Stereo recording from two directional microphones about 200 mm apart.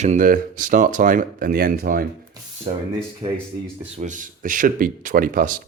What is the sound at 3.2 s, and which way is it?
Speech, 30° right (ahead or behind).